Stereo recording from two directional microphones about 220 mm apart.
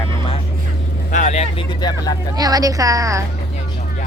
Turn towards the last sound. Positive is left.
turn(degrees=-15)  # may be behind; listen again after turning